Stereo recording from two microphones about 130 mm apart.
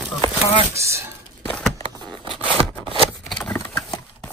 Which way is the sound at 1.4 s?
10° left (ahead or behind).